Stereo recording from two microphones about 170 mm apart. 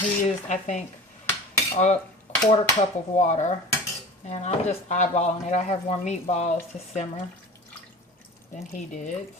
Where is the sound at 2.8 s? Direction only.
40° left (ahead or behind).